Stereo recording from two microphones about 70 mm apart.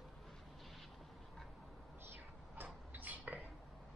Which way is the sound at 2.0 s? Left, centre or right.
Right.